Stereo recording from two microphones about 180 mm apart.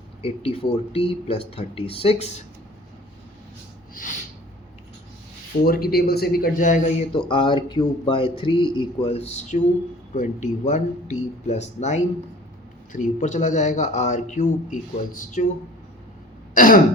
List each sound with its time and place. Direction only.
0.2 s speech: 30° left (ahead or behind)
5.6 s speech: 55° left (ahead or behind)
7.3 s a man's voice: 30° left (ahead or behind)
16.6 s speech: 50° left (ahead or behind)